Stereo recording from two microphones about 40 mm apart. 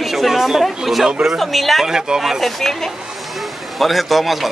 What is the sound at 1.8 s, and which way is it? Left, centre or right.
Speech, centre.